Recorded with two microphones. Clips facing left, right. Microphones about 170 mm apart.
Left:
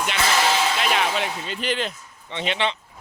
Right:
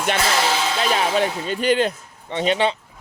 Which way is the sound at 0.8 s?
35° right (ahead or behind).